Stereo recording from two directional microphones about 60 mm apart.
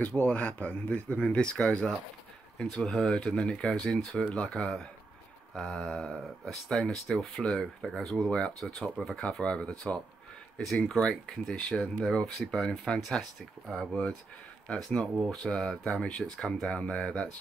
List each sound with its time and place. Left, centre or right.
0.1 s speech: left